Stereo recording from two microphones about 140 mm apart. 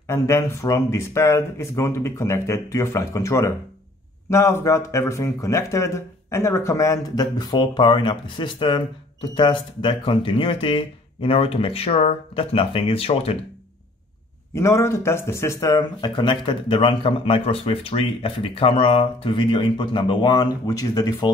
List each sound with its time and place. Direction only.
0.1 s speech: 20° left (ahead or behind); by 13.4 s 45° left (ahead or behind)
14.5 s speech: 20° left (ahead or behind)